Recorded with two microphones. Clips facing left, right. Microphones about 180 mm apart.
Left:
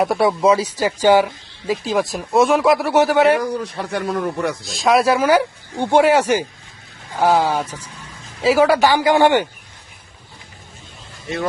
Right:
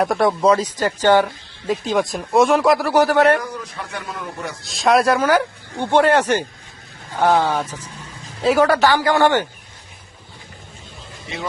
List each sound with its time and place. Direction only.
0.0 s speech: 5° left (ahead or behind)
3.5 s a man's voice: 35° left (ahead or behind)
4.6 s speech: centre (ahead or behind)